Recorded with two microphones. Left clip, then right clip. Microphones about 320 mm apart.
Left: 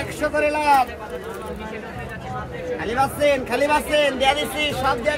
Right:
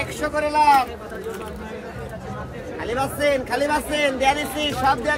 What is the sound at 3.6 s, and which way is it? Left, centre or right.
A man's voice, left.